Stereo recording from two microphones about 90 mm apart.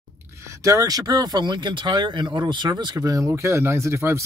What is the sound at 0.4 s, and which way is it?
Speech, 35° right (ahead or behind).